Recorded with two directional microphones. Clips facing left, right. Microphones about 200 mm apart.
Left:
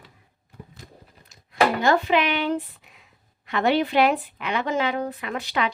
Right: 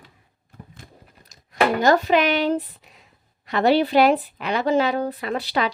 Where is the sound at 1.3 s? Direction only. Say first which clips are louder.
Right 1 dB; 40° right (ahead or behind).